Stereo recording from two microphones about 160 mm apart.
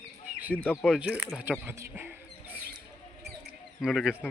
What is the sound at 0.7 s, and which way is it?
Speech, 5° right (ahead or behind).